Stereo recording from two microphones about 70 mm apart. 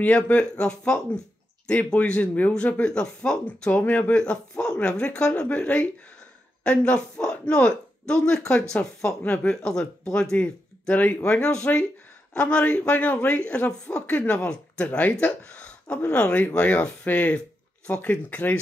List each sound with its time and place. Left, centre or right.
0.0 s a man's voice: centre
3.8 s speech: left
4.1 s a man's voice: centre